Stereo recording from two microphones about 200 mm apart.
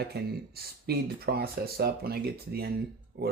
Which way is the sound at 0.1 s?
50° right (ahead or behind).